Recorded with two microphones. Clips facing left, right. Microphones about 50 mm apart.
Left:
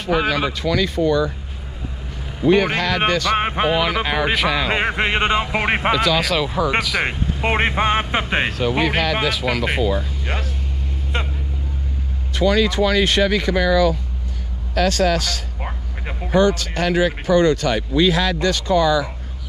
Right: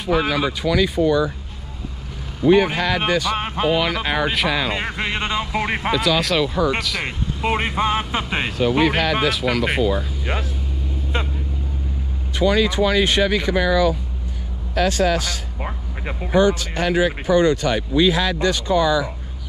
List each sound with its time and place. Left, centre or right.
0.3 s speech: centre
2.4 s speech: centre
3.3 s speech: left
3.7 s speech: centre
4.7 s speech: left
5.9 s speech: centre
7.1 s speech: left
8.5 s speech: centre
12.4 s speech: centre